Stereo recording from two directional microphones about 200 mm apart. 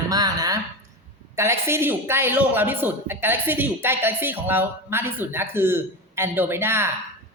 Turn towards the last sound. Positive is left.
turn(degrees=-10)  # may be behind; listen again after turning